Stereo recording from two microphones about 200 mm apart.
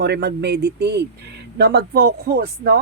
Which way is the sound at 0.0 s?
55° right (ahead or behind).